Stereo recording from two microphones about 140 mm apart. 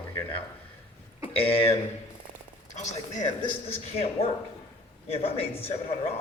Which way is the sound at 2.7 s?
55° left (ahead or behind).